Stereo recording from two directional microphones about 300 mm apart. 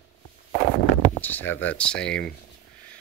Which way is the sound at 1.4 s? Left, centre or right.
Left.